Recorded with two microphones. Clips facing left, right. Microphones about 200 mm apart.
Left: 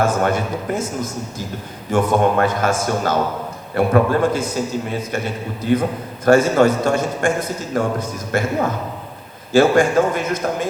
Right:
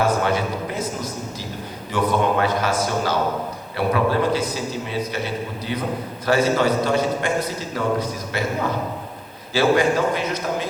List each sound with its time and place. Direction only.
0.0 s a man's voice: 50° left (ahead or behind)
9.5 s a man's voice: 50° left (ahead or behind)